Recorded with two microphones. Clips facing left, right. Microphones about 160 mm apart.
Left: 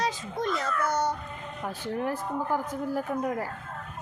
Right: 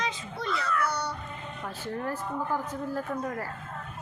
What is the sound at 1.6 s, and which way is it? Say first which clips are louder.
A woman's voice: left 3 dB; 15° left (ahead or behind).